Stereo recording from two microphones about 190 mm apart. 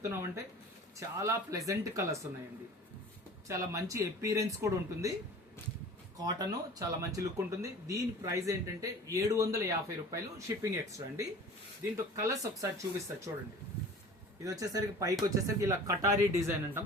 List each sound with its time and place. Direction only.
0.0 s speech: 15° right (ahead or behind)
3.5 s speech: 15° right (ahead or behind)
6.2 s speech: 20° right (ahead or behind)
14.4 s speech: 20° right (ahead or behind)